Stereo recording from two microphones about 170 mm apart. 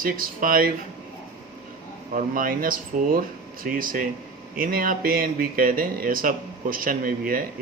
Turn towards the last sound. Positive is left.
turn(degrees=-55)  # may be behind; listen again after turning